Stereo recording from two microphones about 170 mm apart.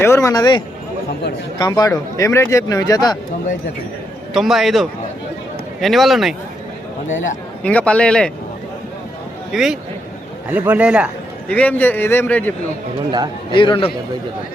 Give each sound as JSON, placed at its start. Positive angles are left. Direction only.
{"t": 0.0, "sound": "a man's voice", "side_deg": 15}
{"t": 4.4, "sound": "a man's voice", "side_deg": 0}
{"t": 7.6, "sound": "a man's voice", "side_deg": 10}
{"t": 9.5, "sound": "a man's voice", "side_deg": 0}
{"t": 11.4, "sound": "a man's voice", "side_deg": 10}
{"t": 13.1, "sound": "a man's voice", "side_deg": -25}
{"t": 13.5, "sound": "speech", "side_deg": 30}